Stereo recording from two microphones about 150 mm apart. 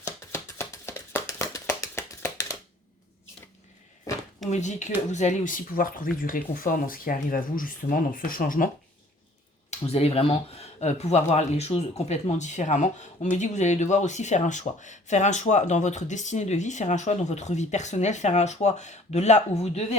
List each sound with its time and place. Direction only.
0.3 s a sound: 20° left (ahead or behind)
4.4 s speech: 50° left (ahead or behind); by 8.7 s 65° left (ahead or behind)
9.6 s speech: 45° left (ahead or behind)